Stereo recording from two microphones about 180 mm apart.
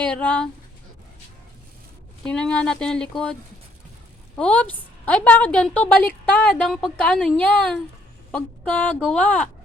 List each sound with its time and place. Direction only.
0.0 s a woman's voice: 5° left (ahead or behind)
2.2 s speech: 5° left (ahead or behind)
4.4 s a woman's voice: 5° left (ahead or behind)